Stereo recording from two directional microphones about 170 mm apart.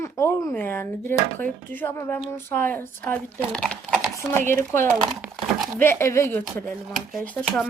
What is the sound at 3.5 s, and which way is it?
Computer keyboard, 5° left (ahead or behind).